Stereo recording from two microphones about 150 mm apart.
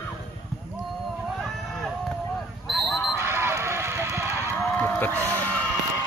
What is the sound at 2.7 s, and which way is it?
Basketball bounce, centre (ahead or behind).